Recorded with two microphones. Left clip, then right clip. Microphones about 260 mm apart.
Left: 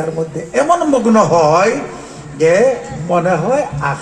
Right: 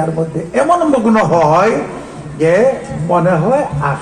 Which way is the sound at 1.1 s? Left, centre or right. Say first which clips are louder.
Left 2 dB; left.